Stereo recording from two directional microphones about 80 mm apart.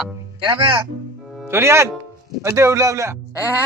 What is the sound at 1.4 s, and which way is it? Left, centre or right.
Speech, right.